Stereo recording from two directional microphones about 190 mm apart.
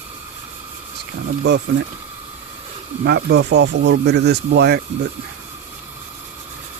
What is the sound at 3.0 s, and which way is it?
Speech, 60° right (ahead or behind).